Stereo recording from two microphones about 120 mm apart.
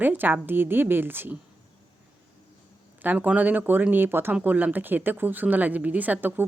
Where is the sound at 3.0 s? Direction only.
15° right (ahead or behind).